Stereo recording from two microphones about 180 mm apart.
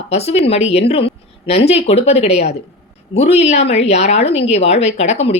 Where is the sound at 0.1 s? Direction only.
35° left (ahead or behind).